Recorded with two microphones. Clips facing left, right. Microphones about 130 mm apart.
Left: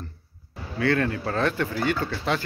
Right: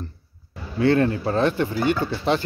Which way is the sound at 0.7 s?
25° right (ahead or behind).